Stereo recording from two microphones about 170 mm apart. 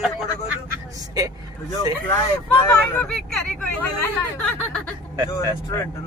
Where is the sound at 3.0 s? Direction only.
5° left (ahead or behind).